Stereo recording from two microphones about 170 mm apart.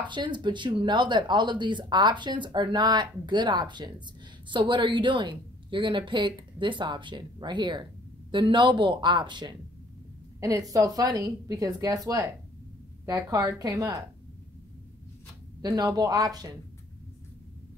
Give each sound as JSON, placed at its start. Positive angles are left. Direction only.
{"t": 0.1, "sound": "speech", "side_deg": -25}
{"t": 15.6, "sound": "speech", "side_deg": -25}